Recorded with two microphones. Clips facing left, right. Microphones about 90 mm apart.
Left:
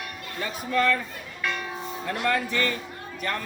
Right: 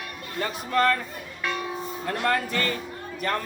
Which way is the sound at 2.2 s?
45° right (ahead or behind).